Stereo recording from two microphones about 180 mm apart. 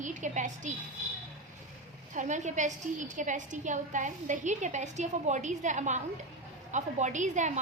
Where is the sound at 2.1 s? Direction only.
40° right (ahead or behind).